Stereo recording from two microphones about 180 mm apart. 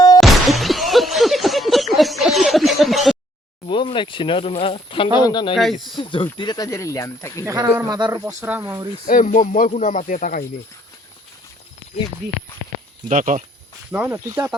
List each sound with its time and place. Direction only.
0.2 s a sound: centre (ahead or behind)
3.7 s speech: 25° left (ahead or behind)
7.4 s speech: 20° right (ahead or behind)
9.0 s speech: 45° left (ahead or behind)
13.1 s speech: 45° right (ahead or behind)
13.9 s speech: 10° right (ahead or behind)